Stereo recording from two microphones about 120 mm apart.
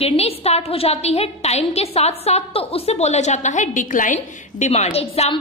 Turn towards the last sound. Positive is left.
turn(degrees=60)  # may be behind; listen again after turning